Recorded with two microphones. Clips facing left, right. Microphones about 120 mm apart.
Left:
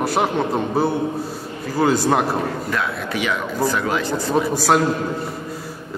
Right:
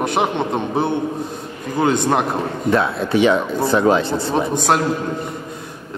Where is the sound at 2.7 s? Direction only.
30° right (ahead or behind).